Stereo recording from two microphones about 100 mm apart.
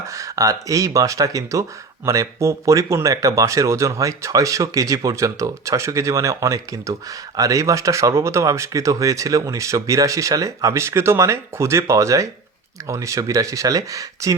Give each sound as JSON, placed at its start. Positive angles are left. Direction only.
{"t": 0.1, "sound": "speech", "side_deg": -30}